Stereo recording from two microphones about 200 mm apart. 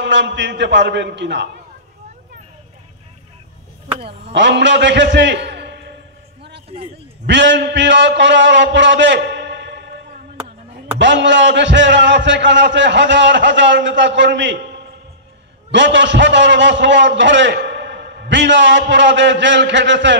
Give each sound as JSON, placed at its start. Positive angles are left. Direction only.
{"t": 0.0, "sound": "a man's voice", "side_deg": -60}
{"t": 4.0, "sound": "a man's voice", "side_deg": -60}
{"t": 6.7, "sound": "a man's voice", "side_deg": -30}
{"t": 7.2, "sound": "a man's voice", "side_deg": -65}
{"t": 11.0, "sound": "a man's voice", "side_deg": -65}
{"t": 15.7, "sound": "a man's voice", "side_deg": -65}